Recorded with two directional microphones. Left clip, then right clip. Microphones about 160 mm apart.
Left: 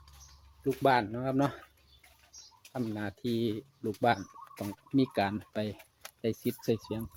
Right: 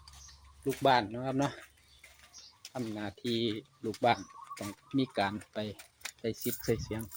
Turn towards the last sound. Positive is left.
turn(degrees=45)  # may be behind; listen again after turning